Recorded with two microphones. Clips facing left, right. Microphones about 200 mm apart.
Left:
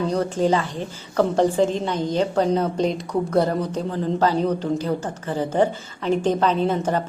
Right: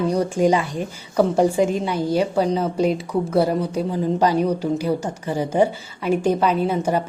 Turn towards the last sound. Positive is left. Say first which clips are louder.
# right 1 dB
turn(degrees=-10)  # may be behind; listen again after turning